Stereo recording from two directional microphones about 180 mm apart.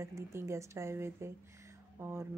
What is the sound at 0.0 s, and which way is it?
A woman's voice, 15° right (ahead or behind).